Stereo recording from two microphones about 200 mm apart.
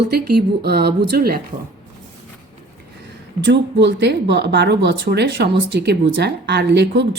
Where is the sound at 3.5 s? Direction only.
60° right (ahead or behind).